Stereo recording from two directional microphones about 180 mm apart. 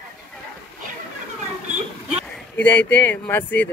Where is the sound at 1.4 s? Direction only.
40° right (ahead or behind).